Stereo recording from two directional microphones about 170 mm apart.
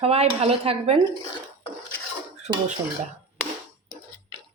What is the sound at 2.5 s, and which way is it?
Speech, 25° right (ahead or behind).